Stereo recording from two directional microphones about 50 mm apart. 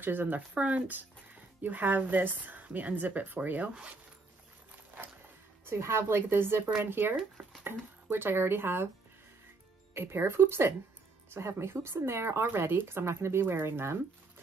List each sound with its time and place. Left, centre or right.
0.0 s a woman's voice: right
5.7 s speech: right
9.9 s speech: right
12.4 s speech: right